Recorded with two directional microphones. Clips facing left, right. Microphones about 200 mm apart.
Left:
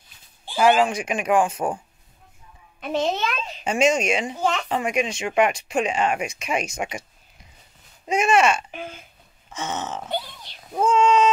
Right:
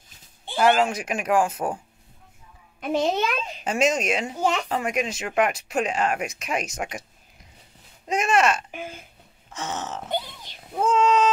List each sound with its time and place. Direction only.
0.6 s speech: centre (ahead or behind)
2.8 s speech: 10° right (ahead or behind)
8.1 s speech: centre (ahead or behind)
10.0 s oink: 15° right (ahead or behind)
10.8 s a sound: centre (ahead or behind)